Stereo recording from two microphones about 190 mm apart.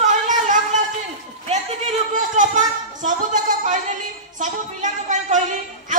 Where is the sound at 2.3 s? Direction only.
40° right (ahead or behind).